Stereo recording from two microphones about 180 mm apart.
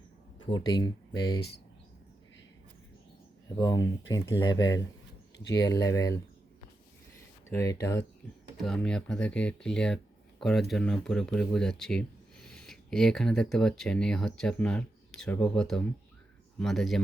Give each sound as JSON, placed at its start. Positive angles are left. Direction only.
{"t": 0.4, "sound": "speech", "side_deg": 25}
{"t": 3.6, "sound": "speech", "side_deg": 20}
{"t": 5.8, "sound": "speech", "side_deg": 20}
{"t": 7.5, "sound": "speech", "side_deg": 15}
{"t": 8.6, "sound": "speech", "side_deg": 5}